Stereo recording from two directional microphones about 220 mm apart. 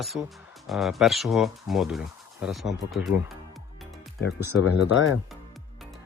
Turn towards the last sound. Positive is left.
turn(degrees=55)  # may be behind; listen again after turning